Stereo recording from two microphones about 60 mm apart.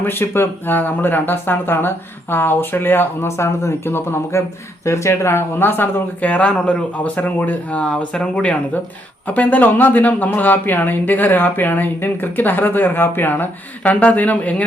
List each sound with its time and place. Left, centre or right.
0.0 s speech: left; by 8.5 s centre
9.2 s speech: left